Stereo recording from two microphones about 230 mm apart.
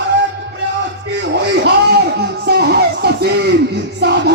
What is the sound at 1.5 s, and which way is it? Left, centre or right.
Music, right.